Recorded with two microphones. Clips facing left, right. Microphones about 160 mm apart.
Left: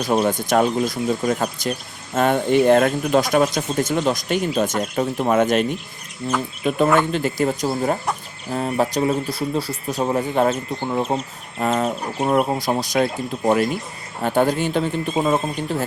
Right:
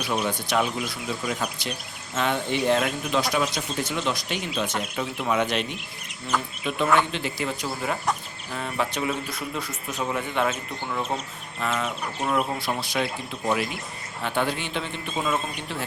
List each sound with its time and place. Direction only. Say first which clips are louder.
0.0 s speech: left 8 dB; 45° left (ahead or behind)